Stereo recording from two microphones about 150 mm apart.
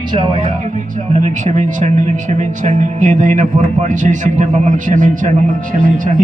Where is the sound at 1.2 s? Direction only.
50° right (ahead or behind).